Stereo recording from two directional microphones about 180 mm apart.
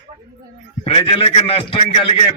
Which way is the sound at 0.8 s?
30° left (ahead or behind).